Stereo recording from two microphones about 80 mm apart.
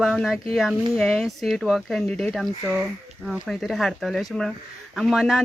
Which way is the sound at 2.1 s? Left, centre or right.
Centre.